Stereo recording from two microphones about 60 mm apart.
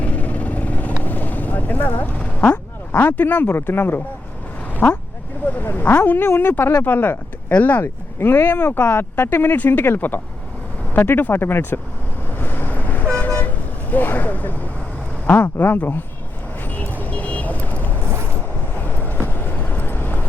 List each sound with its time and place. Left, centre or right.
0.0 s vehicle: left
2.9 s speech: left
4.7 s vehicle: left
5.5 s speech: left
12.3 s vehicle: left
13.9 s speech: left
16.6 s vehicle: left